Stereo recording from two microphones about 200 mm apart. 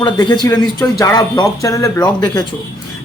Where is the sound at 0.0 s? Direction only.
20° left (ahead or behind).